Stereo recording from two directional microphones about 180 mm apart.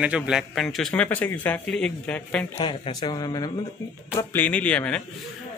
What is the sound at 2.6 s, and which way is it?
Speech, 25° left (ahead or behind).